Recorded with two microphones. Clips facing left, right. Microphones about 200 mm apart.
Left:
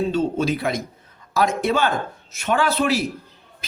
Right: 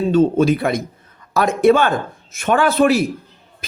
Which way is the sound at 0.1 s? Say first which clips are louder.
Right 7 dB; 50° right (ahead or behind).